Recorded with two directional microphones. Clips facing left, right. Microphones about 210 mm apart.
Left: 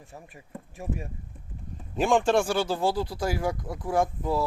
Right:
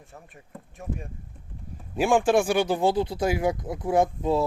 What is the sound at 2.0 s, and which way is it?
Speech, 10° right (ahead or behind).